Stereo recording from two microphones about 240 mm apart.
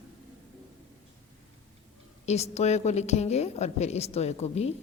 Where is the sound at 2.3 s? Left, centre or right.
Left.